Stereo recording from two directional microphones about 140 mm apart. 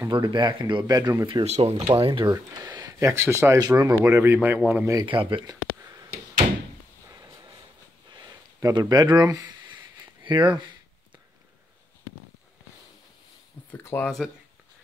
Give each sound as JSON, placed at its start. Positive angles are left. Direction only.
{"t": 0.1, "sound": "speech", "side_deg": -35}
{"t": 1.4, "sound": "speech", "side_deg": -50}
{"t": 2.3, "sound": "speech", "side_deg": -25}
{"t": 5.0, "sound": "speech", "side_deg": -35}
{"t": 6.4, "sound": "door", "side_deg": -40}
{"t": 8.1, "sound": "a sound", "side_deg": -30}
{"t": 10.2, "sound": "speech", "side_deg": -35}
{"t": 13.7, "sound": "speech", "side_deg": 15}